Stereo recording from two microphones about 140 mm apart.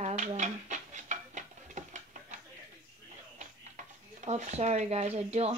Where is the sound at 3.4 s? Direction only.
60° right (ahead or behind).